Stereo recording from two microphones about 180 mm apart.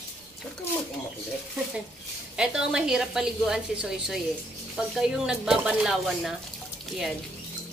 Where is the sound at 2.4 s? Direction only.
5° right (ahead or behind).